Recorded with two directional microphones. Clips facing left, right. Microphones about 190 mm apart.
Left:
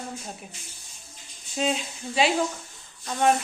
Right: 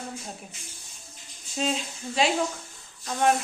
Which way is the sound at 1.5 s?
Centre (ahead or behind).